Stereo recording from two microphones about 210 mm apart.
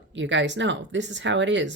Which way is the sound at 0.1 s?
60° right (ahead or behind).